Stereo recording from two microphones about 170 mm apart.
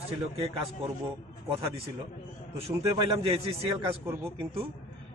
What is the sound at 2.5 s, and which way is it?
A man's voice, 35° right (ahead or behind).